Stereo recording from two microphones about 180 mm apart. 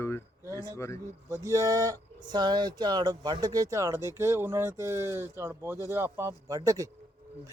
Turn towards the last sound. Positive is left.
turn(degrees=-20)  # may be behind; listen again after turning